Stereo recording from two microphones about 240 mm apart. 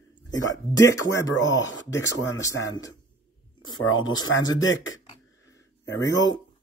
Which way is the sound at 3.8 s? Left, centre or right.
Left.